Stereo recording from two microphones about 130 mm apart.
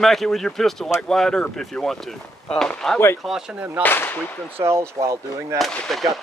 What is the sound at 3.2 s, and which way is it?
Speech, 5° right (ahead or behind).